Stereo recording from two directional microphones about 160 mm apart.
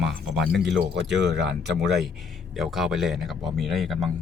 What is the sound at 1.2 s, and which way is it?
Speech, 90° right.